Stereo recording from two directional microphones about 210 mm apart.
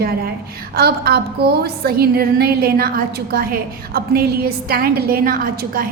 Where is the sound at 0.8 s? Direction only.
45° right (ahead or behind).